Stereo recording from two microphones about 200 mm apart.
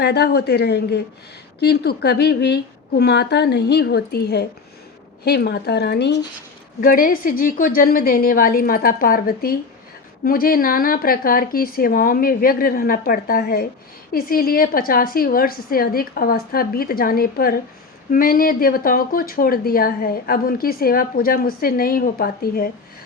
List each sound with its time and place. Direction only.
0.0 s a woman's voice: 55° left (ahead or behind)
6.8 s speech: 45° left (ahead or behind)